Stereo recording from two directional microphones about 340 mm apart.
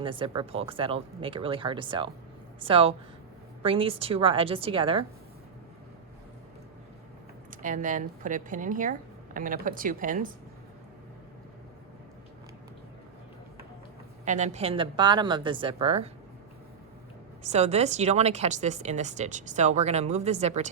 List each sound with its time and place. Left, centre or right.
0.0 s speech: centre
7.5 s speech: right
14.3 s speech: centre
17.4 s speech: centre